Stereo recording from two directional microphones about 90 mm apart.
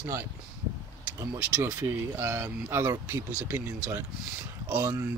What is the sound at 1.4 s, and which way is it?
Speech, 15° right (ahead or behind).